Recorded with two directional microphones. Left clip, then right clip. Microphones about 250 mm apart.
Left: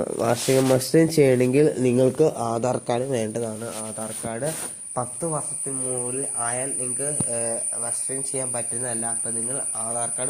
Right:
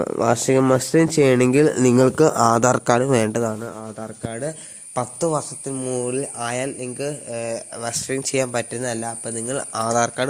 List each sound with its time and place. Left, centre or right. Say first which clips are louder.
0.0 s speech: right 4 dB; right
2.3 s speech: right 10 dB; right
2.6 s speech: right 7 dB; right
5.2 s speech: right 6 dB; right